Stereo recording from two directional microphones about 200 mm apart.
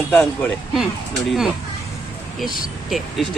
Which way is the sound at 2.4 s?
45° left (ahead or behind).